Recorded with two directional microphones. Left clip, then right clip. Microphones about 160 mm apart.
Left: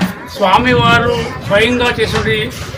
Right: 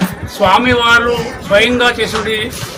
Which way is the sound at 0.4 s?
15° right (ahead or behind).